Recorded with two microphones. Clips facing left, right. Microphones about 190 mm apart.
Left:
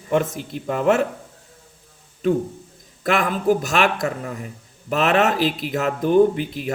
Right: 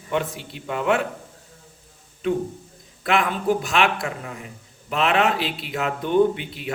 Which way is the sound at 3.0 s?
45° left (ahead or behind).